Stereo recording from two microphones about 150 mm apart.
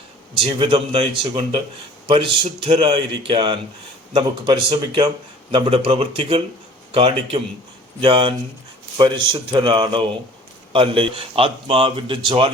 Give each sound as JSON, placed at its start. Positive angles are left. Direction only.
{"t": 0.4, "sound": "speech", "side_deg": -35}